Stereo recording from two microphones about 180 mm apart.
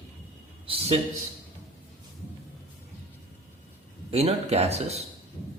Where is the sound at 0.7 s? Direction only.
35° right (ahead or behind).